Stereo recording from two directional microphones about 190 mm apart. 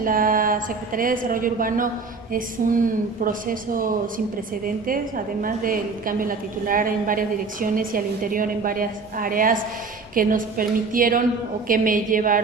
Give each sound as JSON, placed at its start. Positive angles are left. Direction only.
{"t": 0.0, "sound": "a woman's voice", "side_deg": -45}